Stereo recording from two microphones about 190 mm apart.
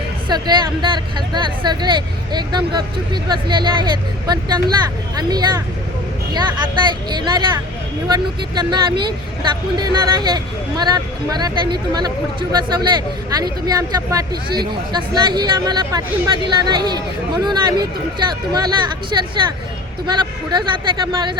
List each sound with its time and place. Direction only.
0.3 s speech: 25° right (ahead or behind)